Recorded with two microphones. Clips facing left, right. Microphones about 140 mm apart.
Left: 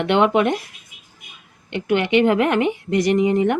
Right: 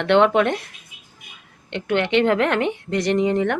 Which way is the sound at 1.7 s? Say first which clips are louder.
Left 2 dB; 10° left (ahead or behind).